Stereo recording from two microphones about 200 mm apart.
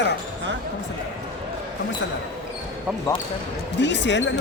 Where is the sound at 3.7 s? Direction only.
60° left (ahead or behind).